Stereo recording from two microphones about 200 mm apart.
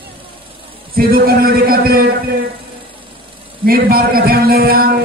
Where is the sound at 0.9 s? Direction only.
50° right (ahead or behind).